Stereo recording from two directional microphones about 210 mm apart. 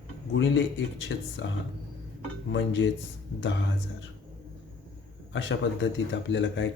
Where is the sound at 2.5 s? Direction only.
60° left (ahead or behind).